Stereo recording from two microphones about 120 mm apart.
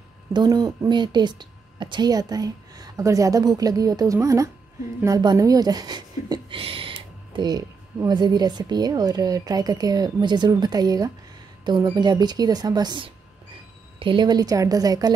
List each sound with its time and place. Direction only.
0.3 s speech: 35° right (ahead or behind)
6.6 s speech: 50° right (ahead or behind); by 15.1 s 30° right (ahead or behind)